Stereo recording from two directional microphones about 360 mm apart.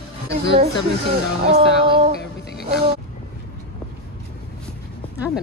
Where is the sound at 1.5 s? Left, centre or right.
Centre.